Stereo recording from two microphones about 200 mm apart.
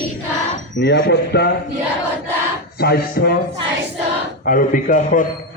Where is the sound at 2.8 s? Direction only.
50° left (ahead or behind).